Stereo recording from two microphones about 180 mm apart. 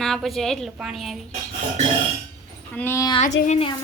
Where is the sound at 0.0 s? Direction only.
Centre (ahead or behind).